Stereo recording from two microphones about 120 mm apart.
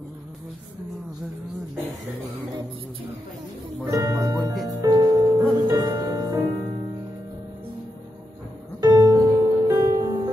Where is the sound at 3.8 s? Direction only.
25° right (ahead or behind).